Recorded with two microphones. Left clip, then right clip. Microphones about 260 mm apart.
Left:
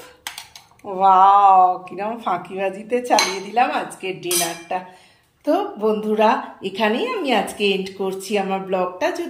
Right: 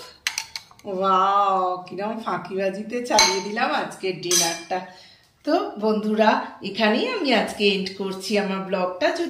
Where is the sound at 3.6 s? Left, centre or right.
Centre.